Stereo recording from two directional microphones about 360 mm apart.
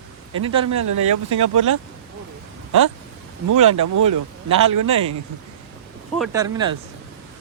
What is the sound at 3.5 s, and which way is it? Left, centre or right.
Speech, right.